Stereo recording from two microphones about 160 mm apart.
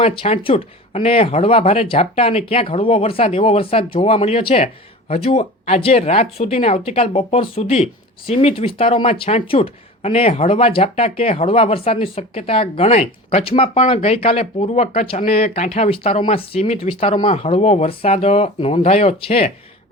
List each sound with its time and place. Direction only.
0.0 s speech: 35° left (ahead or behind)